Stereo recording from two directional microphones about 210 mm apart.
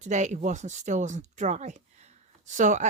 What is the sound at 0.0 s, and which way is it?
Speech, 35° right (ahead or behind).